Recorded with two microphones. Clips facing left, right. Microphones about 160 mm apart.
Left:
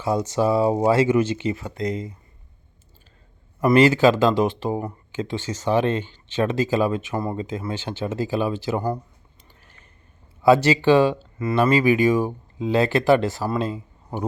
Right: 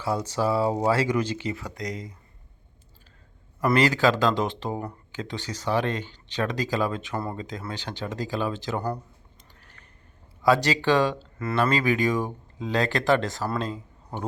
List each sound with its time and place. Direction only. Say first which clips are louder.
0.0 s speech: left 5 dB; 20° left (ahead or behind)
3.6 s speech: left 6 dB; 15° left (ahead or behind)
10.4 s speech: left 5 dB; 15° left (ahead or behind)